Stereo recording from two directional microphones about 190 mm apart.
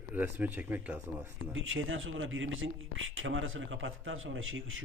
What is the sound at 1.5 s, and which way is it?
Speech, 90° right.